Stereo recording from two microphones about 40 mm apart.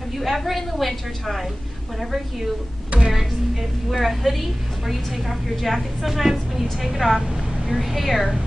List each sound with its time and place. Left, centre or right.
0.2 s a woman's voice: centre
2.9 s a sound: right
3.9 s a woman's voice: centre